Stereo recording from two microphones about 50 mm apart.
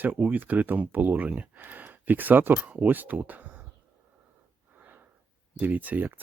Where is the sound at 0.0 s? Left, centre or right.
Right.